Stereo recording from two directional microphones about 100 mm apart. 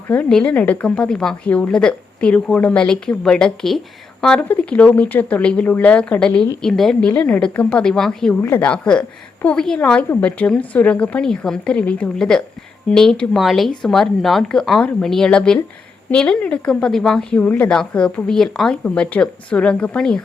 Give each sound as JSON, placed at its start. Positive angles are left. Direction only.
{"t": 0.1, "sound": "speech", "side_deg": 15}
{"t": 8.4, "sound": "speech", "side_deg": 20}